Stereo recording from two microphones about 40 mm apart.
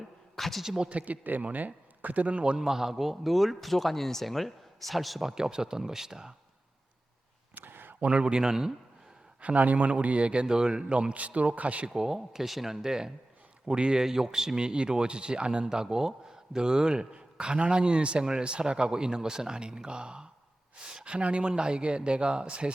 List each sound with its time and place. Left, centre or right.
0.3 s a sound: centre
0.9 s speech: right
2.4 s speech: right
2.6 s speech: centre
5.3 s speech: centre
7.5 s a sound: right
8.0 s speech: right
9.4 s speech: right
10.4 s speech: centre; by 11.9 s right
11.9 s speech: centre
14.0 s speech: centre
15.7 s speech: centre